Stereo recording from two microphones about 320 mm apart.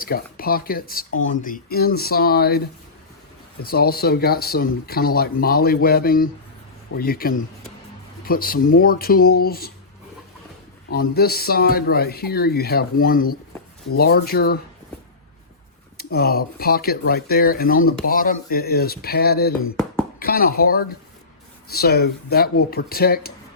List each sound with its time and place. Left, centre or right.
0.0 s speech: left
3.6 s speech: left
10.9 s speech: left
16.0 s speech: left